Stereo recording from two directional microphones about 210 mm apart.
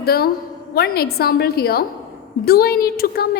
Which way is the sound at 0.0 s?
45° left (ahead or behind).